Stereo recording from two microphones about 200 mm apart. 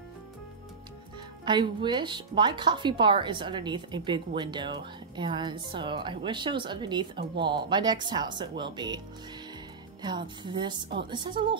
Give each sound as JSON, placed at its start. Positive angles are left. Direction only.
{"t": 1.4, "sound": "speech", "side_deg": -25}
{"t": 10.0, "sound": "speech", "side_deg": -20}